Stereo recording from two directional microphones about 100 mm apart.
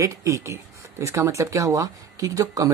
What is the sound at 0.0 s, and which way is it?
Speech, 30° right (ahead or behind).